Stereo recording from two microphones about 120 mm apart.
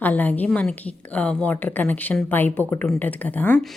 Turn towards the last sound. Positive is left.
turn(degrees=15)  # may be behind; listen again after turning